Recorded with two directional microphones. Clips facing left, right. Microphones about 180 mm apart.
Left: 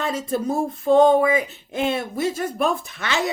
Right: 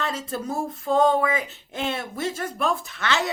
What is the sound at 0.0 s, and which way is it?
A woman's voice, 15° left (ahead or behind).